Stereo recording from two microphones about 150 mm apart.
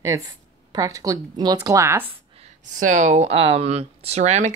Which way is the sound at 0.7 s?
25° right (ahead or behind).